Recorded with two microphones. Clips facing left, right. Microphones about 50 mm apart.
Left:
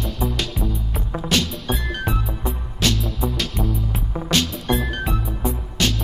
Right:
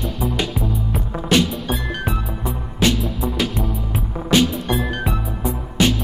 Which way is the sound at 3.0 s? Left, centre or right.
Centre.